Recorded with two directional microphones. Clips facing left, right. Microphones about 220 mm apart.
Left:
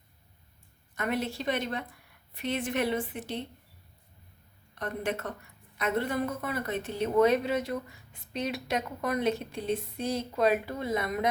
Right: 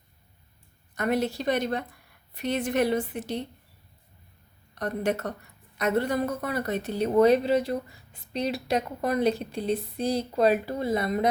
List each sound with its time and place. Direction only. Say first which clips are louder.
0.9 s speech: right 5 dB; 40° right (ahead or behind)
4.7 s speech: right 5 dB; 40° right (ahead or behind)